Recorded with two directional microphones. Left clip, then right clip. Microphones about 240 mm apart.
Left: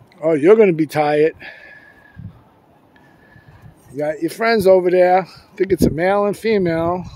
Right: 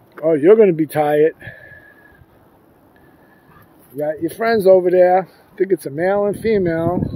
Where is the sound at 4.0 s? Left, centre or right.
Centre.